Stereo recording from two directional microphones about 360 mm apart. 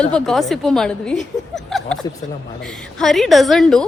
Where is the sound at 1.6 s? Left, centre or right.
Centre.